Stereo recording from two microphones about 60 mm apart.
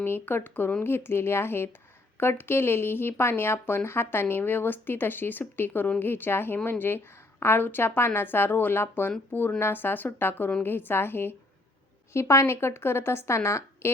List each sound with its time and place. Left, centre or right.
0.0 s a woman's voice: left
12.1 s a woman's voice: left